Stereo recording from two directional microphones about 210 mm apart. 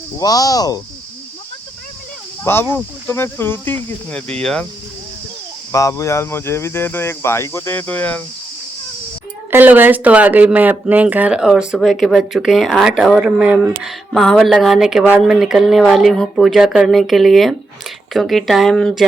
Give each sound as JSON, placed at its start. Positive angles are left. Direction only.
{"t": 0.2, "sound": "speech", "side_deg": 15}
{"t": 2.4, "sound": "speech", "side_deg": 10}
{"t": 5.7, "sound": "speech", "side_deg": 15}
{"t": 9.5, "sound": "speech", "side_deg": -10}